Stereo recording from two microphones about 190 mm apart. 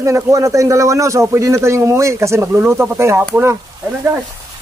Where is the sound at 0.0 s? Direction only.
15° right (ahead or behind).